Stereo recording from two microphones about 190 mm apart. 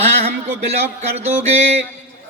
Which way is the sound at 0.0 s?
35° right (ahead or behind).